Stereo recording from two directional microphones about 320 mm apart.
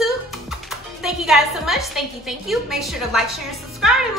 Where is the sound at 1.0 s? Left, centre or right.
Centre.